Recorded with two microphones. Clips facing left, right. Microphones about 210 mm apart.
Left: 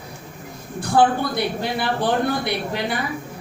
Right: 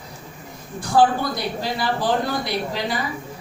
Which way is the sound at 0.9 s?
60° left (ahead or behind).